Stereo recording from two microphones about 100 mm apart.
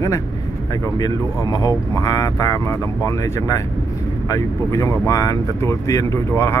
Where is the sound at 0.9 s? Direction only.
40° left (ahead or behind).